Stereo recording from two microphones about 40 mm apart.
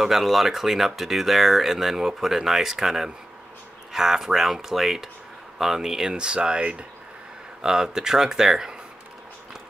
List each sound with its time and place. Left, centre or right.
0.0 s speech: centre; by 6.9 s right
7.6 s speech: centre